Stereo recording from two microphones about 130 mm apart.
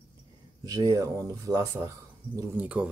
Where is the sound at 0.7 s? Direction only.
25° right (ahead or behind).